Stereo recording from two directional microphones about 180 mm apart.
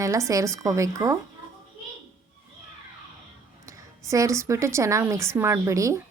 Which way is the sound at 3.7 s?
15° right (ahead or behind).